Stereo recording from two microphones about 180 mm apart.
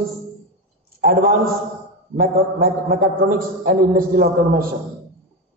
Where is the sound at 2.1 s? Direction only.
55° right (ahead or behind).